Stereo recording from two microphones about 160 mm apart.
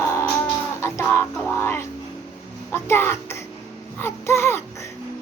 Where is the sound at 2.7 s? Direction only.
15° left (ahead or behind).